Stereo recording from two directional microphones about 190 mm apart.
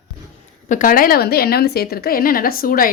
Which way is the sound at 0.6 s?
45° left (ahead or behind).